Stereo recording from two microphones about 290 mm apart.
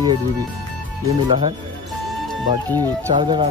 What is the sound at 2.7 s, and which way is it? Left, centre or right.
Speech, centre.